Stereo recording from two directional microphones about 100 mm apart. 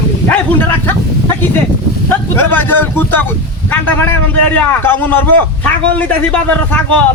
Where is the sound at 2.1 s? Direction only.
20° left (ahead or behind).